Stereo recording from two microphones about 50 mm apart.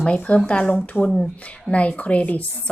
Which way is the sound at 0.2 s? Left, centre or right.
Left.